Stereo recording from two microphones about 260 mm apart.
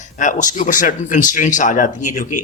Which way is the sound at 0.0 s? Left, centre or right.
Left.